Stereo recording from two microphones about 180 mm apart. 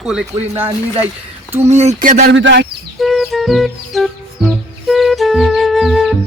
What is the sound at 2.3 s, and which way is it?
Speech, 80° right.